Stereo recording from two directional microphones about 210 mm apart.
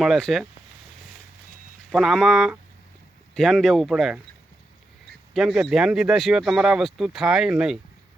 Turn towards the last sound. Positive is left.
turn(degrees=0)  # may be behind; listen again after turning